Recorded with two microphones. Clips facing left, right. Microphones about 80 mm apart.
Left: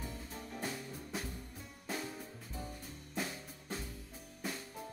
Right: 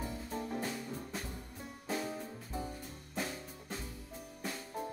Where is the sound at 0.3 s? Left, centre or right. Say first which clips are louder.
Right 8 dB; right.